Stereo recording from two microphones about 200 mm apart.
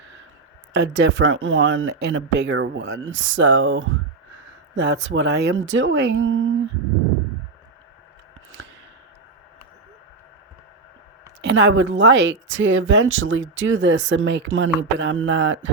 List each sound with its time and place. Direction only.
0.7 s speech: 60° right (ahead or behind)
11.4 s speech: 65° right (ahead or behind)